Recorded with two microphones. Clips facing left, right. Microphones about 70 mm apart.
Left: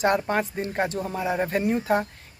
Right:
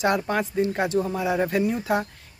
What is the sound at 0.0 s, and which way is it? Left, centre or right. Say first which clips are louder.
Speech: even; left.